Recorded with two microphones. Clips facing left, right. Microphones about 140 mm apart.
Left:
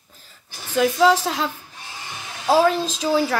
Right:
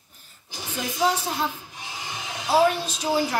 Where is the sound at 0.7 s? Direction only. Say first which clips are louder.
Left 8 dB; 90° left.